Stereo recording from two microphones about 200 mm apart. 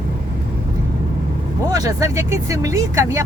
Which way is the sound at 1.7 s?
15° right (ahead or behind).